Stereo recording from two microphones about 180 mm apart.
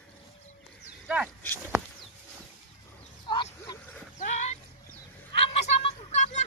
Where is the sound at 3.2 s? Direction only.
25° left (ahead or behind).